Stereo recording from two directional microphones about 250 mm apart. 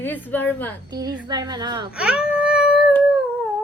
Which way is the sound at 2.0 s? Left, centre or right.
Centre.